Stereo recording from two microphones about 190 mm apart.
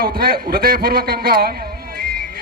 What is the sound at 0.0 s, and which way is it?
A man's voice, 50° right (ahead or behind).